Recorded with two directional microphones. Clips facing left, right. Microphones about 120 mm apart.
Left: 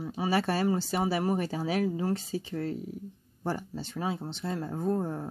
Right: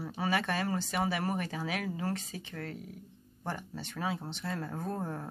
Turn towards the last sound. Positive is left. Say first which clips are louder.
# left 7 dB
turn(degrees=20)  # may be behind; listen again after turning